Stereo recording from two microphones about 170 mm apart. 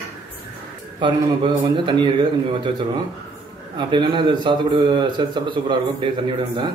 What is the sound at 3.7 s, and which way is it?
A man's voice, 30° right (ahead or behind).